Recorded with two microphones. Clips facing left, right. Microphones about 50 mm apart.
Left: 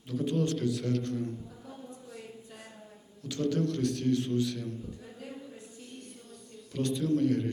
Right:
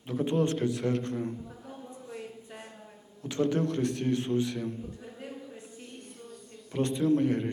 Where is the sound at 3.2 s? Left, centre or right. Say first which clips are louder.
Right 2 dB; right.